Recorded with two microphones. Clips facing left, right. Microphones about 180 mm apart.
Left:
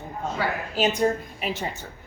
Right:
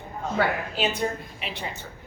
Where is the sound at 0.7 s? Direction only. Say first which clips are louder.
Left 4 dB; 40° left (ahead or behind).